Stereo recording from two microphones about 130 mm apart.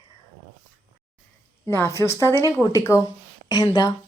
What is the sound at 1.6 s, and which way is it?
Speech, 20° left (ahead or behind).